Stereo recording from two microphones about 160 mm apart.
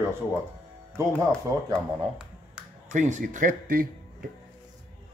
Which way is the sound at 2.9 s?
50° right (ahead or behind).